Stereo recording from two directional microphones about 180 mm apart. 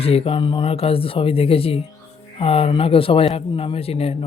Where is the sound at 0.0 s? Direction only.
35° left (ahead or behind).